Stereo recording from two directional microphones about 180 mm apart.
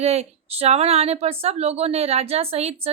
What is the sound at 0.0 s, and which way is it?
A woman's voice, 35° right (ahead or behind).